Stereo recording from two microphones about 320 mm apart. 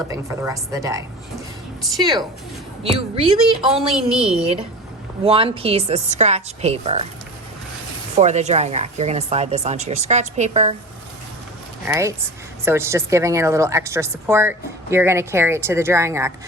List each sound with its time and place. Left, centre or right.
0.1 s a woman's voice: centre
3.7 s a woman's voice: centre
5.2 s speech: centre
8.1 s speech: right
11.9 s a woman's voice: centre